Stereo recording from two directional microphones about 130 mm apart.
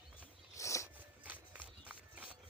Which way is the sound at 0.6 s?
25° left (ahead or behind).